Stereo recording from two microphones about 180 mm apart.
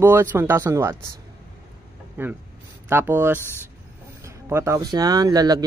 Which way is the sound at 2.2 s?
10° right (ahead or behind).